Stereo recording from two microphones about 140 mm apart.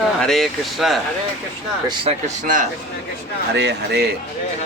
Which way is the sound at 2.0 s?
60° right (ahead or behind).